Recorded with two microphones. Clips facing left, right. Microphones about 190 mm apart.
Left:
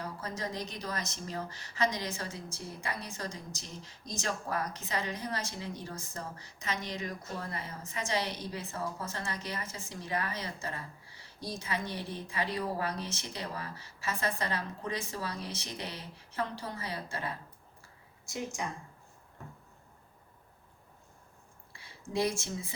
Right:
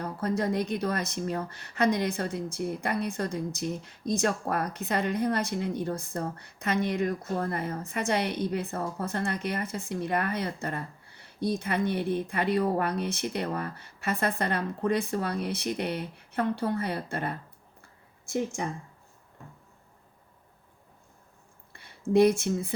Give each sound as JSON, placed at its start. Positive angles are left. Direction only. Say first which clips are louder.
{"t": 0.0, "sound": "a woman's voice", "louder": "right 9 dB", "side_deg": -60}
{"t": 21.7, "sound": "speech", "louder": "right 14 dB", "side_deg": -60}